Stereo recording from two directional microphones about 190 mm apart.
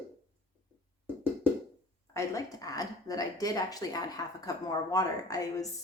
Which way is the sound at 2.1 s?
15° left (ahead or behind).